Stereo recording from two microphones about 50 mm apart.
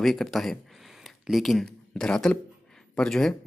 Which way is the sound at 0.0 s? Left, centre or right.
Centre.